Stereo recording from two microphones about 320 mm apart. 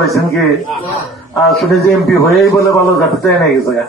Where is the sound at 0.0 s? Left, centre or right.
Centre.